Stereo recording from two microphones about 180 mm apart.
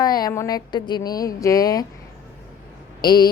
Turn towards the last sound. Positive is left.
turn(degrees=25)  # may be behind; listen again after turning